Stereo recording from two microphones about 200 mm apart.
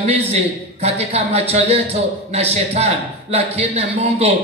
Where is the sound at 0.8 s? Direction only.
30° right (ahead or behind).